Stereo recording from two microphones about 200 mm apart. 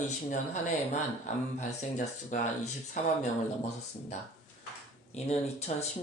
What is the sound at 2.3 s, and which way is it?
Speech, 40° left (ahead or behind).